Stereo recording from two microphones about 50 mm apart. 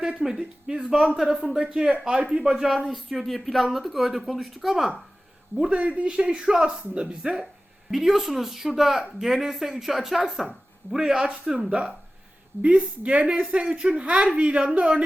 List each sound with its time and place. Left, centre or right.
0.2 s speech: centre
1.7 s a woman's voice: centre
5.5 s a woman's voice: right
7.2 s speech: centre
12.6 s a woman's voice: right